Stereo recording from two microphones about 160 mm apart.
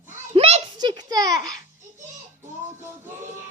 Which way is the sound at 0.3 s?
40° right (ahead or behind).